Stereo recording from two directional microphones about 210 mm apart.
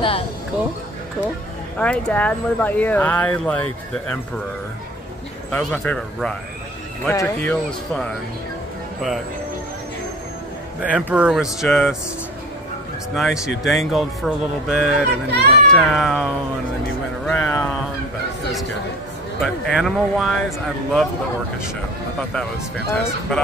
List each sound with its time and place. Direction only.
1.8 s speech: 5° left (ahead or behind)
5.5 s speech: 5° left (ahead or behind)
10.8 s speech: 5° right (ahead or behind)
13.1 s speech: centre (ahead or behind)
15.2 s a child's voice: 50° right (ahead or behind)
15.7 s speech: centre (ahead or behind)
19.4 s speech: centre (ahead or behind)